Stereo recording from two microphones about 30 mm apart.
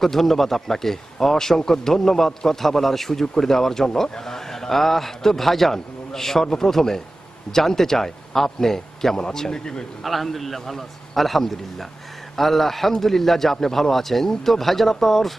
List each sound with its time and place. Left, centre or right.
0.0 s speech: centre
10.0 s a man's voice: centre